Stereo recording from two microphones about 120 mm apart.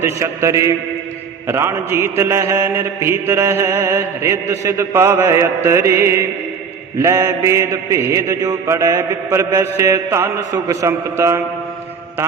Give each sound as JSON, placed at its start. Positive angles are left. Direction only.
{"t": 0.0, "sound": "mantra", "side_deg": -25}